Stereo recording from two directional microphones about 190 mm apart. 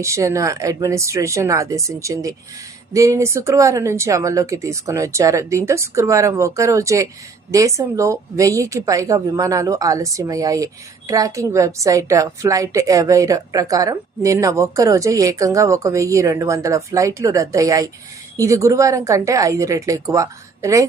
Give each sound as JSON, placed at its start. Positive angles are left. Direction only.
{"t": 0.0, "sound": "a woman's voice", "side_deg": -15}